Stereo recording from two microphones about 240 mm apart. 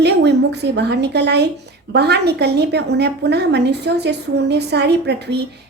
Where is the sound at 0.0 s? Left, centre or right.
Right.